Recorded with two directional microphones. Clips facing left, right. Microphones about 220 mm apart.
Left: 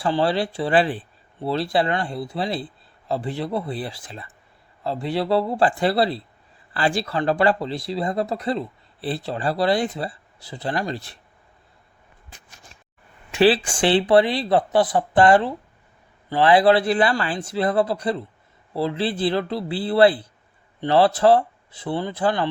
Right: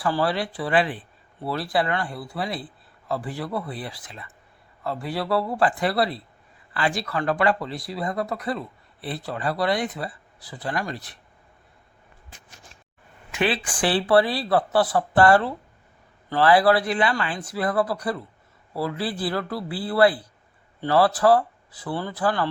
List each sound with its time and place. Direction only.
0.0 s speech: 25° left (ahead or behind)
13.3 s speech: 30° left (ahead or behind)